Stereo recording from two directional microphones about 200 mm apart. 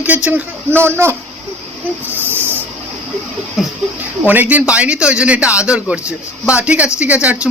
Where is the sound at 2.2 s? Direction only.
10° right (ahead or behind).